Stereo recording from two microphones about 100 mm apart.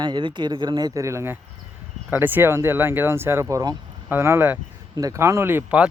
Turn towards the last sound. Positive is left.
turn(degrees=-25)  # may be behind; listen again after turning